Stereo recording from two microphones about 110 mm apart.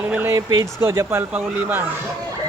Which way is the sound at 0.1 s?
15° right (ahead or behind).